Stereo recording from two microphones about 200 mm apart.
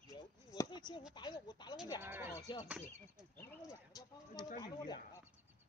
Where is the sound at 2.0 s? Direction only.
10° right (ahead or behind).